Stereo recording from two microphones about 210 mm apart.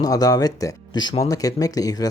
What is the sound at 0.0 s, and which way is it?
Speech, 15° left (ahead or behind).